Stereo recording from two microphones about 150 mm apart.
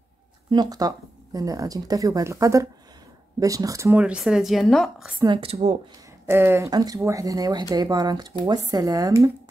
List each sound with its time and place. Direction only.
0.5 s speech: 25° right (ahead or behind)
4.0 s a woman's voice: 5° right (ahead or behind)
5.2 s a woman's voice: 35° right (ahead or behind)
6.2 s speech: 15° right (ahead or behind)